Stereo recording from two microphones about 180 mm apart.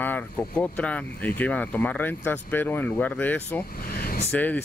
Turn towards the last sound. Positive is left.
turn(degrees=10)  # may be behind; listen again after turning